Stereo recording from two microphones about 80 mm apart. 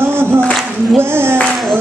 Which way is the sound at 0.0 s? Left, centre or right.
Right.